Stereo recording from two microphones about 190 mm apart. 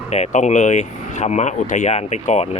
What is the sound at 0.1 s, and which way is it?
Speech, 35° left (ahead or behind).